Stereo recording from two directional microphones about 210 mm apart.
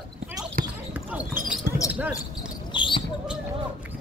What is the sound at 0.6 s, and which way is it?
Basketball bounce, 40° right (ahead or behind).